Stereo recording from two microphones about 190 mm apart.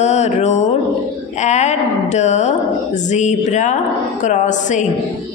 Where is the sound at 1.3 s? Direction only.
40° left (ahead or behind).